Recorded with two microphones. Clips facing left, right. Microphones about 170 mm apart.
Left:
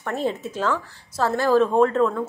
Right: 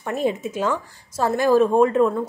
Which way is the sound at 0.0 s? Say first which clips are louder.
Right 2 dB; 15° right (ahead or behind).